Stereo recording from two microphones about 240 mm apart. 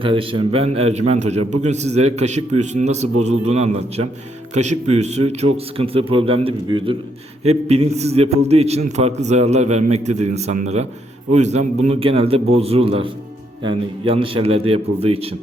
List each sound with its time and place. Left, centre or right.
0.0 s a man's voice: right